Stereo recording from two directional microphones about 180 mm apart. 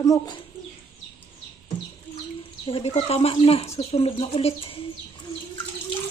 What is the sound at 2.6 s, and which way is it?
Speech, 35° left (ahead or behind).